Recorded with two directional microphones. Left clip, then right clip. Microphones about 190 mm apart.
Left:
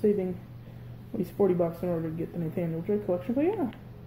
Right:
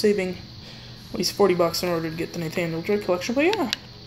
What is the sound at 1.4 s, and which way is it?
Speech, 5° right (ahead or behind).